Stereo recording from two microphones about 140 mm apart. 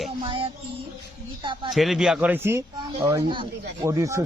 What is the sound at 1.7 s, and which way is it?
Speech, centre (ahead or behind).